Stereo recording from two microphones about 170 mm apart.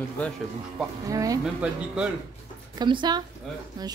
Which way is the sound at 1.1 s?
20° right (ahead or behind).